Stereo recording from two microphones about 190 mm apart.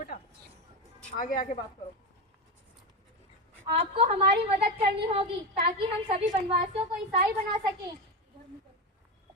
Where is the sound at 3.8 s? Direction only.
35° right (ahead or behind).